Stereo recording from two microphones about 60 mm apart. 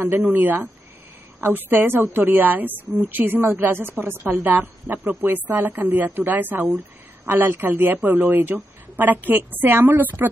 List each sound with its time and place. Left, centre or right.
0.1 s a woman's voice: right